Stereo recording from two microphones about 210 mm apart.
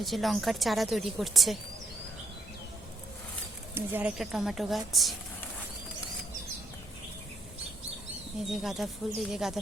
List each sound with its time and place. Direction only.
0.0 s a woman's voice: centre (ahead or behind)
3.8 s a woman's voice: 5° right (ahead or behind)
8.6 s a woman's voice: centre (ahead or behind)